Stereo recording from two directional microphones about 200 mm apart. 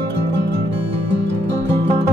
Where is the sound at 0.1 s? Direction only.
60° right (ahead or behind).